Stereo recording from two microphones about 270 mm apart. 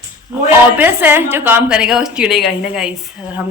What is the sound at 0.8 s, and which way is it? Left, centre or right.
A woman's voice, centre.